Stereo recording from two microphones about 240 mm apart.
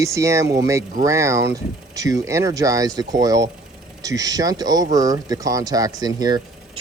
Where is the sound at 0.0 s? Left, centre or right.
Centre.